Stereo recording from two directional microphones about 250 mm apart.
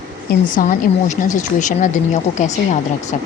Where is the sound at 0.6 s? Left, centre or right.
Left.